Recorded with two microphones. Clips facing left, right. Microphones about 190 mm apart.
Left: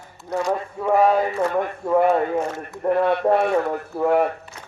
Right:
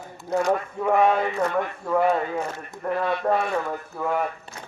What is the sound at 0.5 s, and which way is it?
Speech, 35° left (ahead or behind).